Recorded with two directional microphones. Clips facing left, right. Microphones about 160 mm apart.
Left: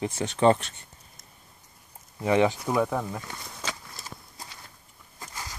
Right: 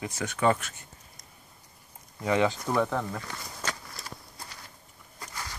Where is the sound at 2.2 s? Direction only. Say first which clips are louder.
Left 3 dB; 20° left (ahead or behind).